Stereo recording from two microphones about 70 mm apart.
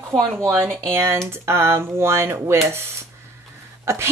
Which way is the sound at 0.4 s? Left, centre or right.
Right.